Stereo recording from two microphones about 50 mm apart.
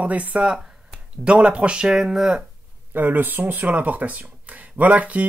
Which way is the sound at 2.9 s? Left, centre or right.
Right.